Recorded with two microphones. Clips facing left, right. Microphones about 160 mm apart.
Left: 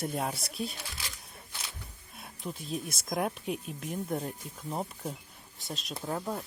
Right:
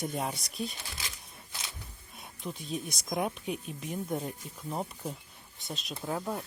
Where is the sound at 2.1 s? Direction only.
Centre (ahead or behind).